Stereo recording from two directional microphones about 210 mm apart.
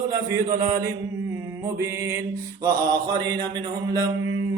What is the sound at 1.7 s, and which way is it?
Mantra, 15° right (ahead or behind).